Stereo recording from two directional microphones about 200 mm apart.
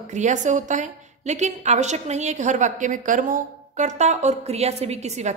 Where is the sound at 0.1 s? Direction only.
35° right (ahead or behind).